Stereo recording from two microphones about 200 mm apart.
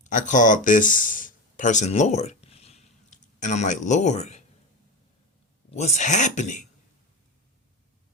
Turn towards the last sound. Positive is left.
turn(degrees=35)  # may be behind; listen again after turning